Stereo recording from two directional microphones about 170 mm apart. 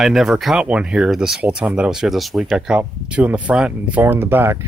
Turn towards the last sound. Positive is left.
turn(degrees=-15)  # may be behind; listen again after turning